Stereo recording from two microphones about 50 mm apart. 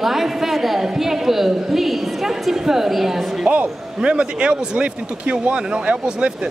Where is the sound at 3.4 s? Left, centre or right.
Right.